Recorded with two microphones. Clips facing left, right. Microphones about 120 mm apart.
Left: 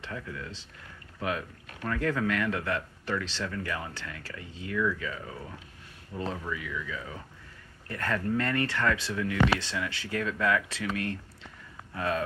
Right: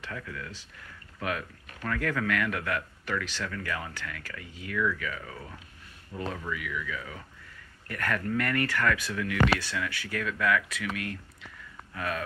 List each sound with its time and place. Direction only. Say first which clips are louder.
0.0 s a man's voice: left 1 dB; 25° left (ahead or behind)